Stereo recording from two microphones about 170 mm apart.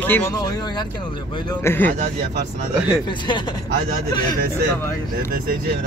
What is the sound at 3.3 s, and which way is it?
Speech, 25° left (ahead or behind).